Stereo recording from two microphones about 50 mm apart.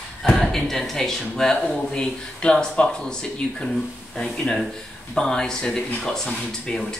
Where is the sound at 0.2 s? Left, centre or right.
Centre.